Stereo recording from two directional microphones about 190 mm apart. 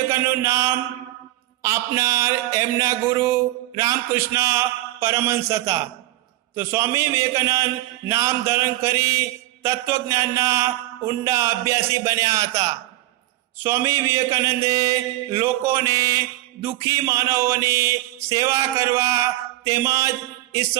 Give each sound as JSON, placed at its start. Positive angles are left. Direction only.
{"t": 0.1, "sound": "speech", "side_deg": -15}